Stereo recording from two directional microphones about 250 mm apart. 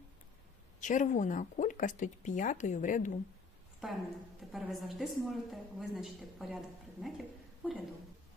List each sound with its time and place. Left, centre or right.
0.8 s speech: left
4.4 s a woman's voice: centre